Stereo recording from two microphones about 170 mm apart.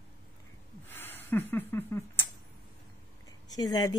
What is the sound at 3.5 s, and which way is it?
Speech, 20° left (ahead or behind).